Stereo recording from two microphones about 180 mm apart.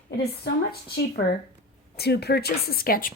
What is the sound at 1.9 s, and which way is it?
A woman's voice, 65° left (ahead or behind).